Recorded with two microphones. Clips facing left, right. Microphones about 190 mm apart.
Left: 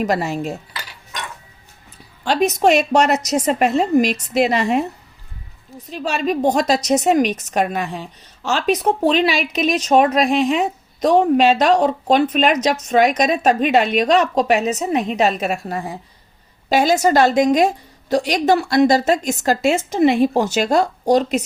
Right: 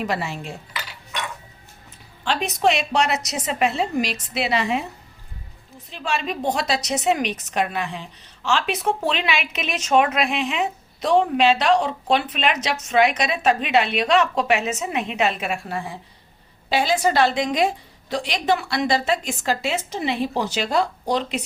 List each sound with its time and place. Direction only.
0.0 s speech: 40° left (ahead or behind)
2.2 s a woman's voice: 45° left (ahead or behind)
5.9 s a woman's voice: 40° left (ahead or behind)